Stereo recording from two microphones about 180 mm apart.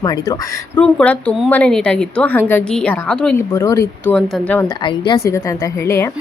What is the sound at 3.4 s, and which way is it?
Speech, 15° left (ahead or behind).